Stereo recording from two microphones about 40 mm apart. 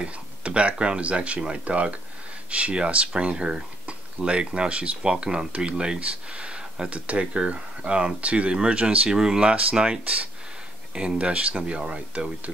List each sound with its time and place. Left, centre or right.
0.0 s speech: right
9.1 s speech: centre